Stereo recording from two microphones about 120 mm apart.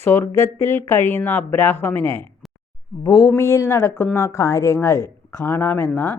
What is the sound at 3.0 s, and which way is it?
A woman's voice, 30° left (ahead or behind).